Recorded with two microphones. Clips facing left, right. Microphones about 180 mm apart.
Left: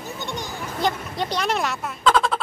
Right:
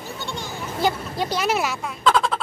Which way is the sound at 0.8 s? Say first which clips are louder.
Right 1 dB; 5° right (ahead or behind).